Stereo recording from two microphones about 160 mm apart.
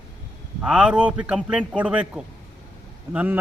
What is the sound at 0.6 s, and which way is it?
A man's voice, 5° right (ahead or behind).